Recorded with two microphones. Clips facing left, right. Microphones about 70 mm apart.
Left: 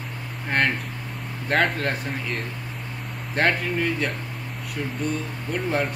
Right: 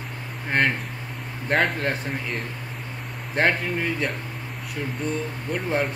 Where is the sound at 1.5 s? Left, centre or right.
Centre.